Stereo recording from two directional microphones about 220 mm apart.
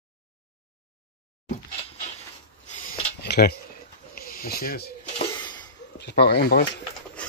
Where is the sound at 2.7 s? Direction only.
35° left (ahead or behind).